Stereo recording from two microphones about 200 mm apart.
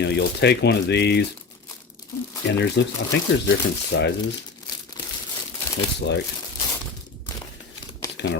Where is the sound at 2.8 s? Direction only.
60° left (ahead or behind).